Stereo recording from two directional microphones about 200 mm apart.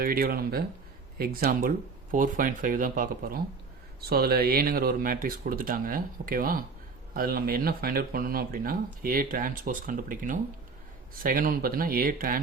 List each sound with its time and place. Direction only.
0.0 s speech: 45° right (ahead or behind)